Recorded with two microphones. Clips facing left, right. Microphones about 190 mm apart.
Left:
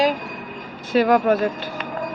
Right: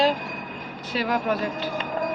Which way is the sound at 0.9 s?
50° left (ahead or behind).